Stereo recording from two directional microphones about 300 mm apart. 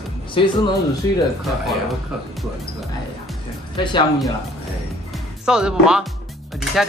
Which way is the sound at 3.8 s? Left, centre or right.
Centre.